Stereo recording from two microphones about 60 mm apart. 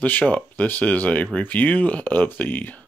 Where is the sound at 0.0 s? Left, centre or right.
Left.